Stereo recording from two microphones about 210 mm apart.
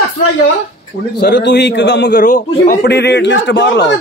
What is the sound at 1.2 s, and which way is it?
Speech, 50° left (ahead or behind).